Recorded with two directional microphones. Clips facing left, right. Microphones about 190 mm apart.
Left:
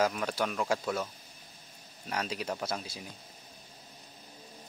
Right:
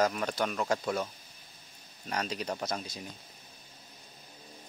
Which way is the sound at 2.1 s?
5° left (ahead or behind).